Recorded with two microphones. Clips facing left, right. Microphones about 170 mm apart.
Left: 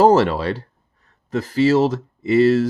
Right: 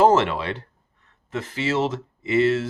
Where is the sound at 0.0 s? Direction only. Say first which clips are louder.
Left 4 dB; 35° left (ahead or behind).